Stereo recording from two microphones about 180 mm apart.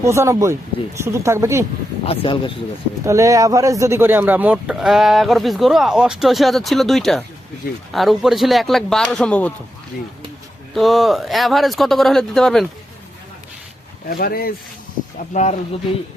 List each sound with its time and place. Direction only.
0.0 s speech: 15° right (ahead or behind)
2.0 s speech: 30° left (ahead or behind)
3.0 s speech: 15° right (ahead or behind); by 9.5 s 5° left (ahead or behind)
10.8 s speech: centre (ahead or behind)
14.1 s speech: 55° left (ahead or behind)
15.3 s speech: 40° left (ahead or behind)